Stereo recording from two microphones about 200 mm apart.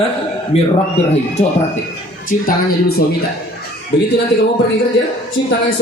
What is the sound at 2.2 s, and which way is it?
Speech, 45° left (ahead or behind).